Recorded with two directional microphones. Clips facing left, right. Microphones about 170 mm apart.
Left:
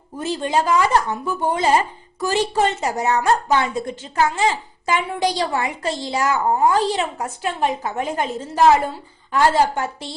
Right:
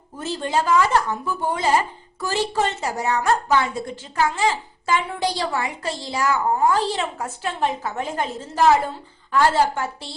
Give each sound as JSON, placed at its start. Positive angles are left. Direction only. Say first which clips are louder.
{"t": 0.2, "sound": "a woman's voice", "louder": "left 3 dB", "side_deg": 15}